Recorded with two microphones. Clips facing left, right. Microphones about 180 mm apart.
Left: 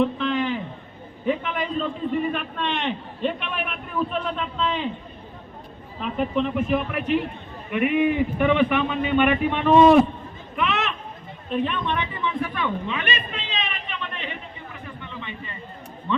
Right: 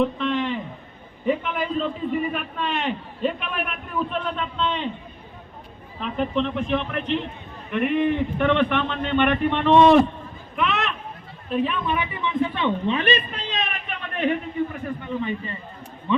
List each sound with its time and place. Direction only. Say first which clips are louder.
0.0 s a sound: even; centre (ahead or behind)
1.2 s a man's voice: right 1 dB; centre (ahead or behind)
6.0 s a man's voice: even; 5° left (ahead or behind)
10.5 s chatter: even; centre (ahead or behind)
11.4 s a man's voice: right 1 dB; centre (ahead or behind)
12.2 s a man's voice: right 6 dB; 20° right (ahead or behind); by 15.5 s 40° right (ahead or behind)
16.1 s speech: right 3 dB; 15° right (ahead or behind)